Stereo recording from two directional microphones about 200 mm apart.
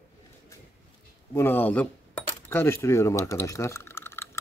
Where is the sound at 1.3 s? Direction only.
10° left (ahead or behind).